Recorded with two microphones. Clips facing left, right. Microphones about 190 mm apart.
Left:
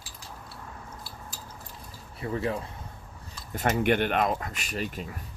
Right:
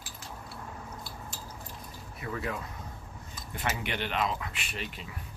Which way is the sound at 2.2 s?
30° left (ahead or behind).